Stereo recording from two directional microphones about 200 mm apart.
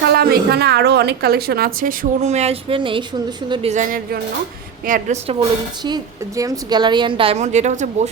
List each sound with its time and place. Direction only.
0.1 s a woman's voice: 50° right (ahead or behind)
5.3 s a woman's voice: 25° right (ahead or behind)